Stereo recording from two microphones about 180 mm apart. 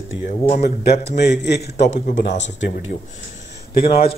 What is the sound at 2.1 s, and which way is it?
Speech, 80° left.